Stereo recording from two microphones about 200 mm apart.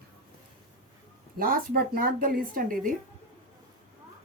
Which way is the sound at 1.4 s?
45° right (ahead or behind).